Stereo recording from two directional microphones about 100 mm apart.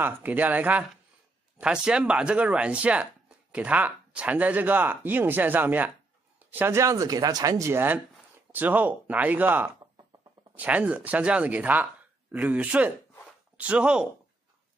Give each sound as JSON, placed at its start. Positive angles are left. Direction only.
{"t": 0.0, "sound": "speech", "side_deg": -15}